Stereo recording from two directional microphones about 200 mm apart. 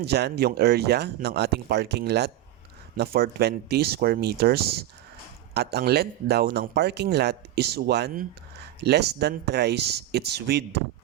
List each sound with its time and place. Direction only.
0.0 s speech: 55° right (ahead or behind)